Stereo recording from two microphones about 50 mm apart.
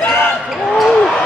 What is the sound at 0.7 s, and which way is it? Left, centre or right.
Basketball bounce, centre.